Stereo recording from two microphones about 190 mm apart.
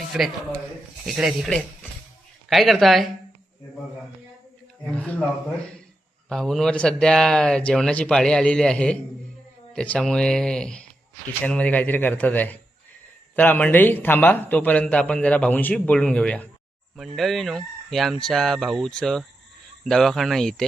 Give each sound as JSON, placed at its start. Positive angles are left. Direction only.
{"t": 0.1, "sound": "speech", "side_deg": -5}
{"t": 6.2, "sound": "a man's voice", "side_deg": 0}